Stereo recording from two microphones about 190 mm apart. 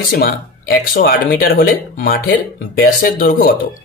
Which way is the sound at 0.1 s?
55° left (ahead or behind).